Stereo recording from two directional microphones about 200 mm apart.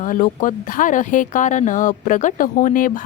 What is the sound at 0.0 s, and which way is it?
Speech, 40° left (ahead or behind).